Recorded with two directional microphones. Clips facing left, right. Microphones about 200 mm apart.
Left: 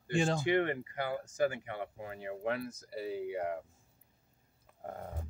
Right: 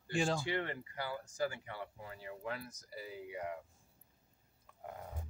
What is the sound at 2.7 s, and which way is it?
Speech, 30° left (ahead or behind).